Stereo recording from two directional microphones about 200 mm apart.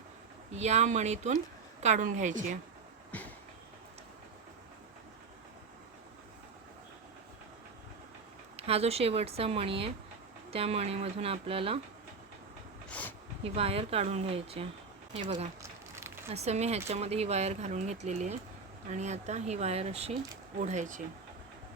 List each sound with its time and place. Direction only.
0.5 s speech: 35° right (ahead or behind)
8.5 s speech: 30° right (ahead or behind)
12.9 s a sound: 10° left (ahead or behind)
13.4 s speech: 30° right (ahead or behind)
16.0 s a sound: 10° right (ahead or behind)
16.3 s speech: 35° right (ahead or behind)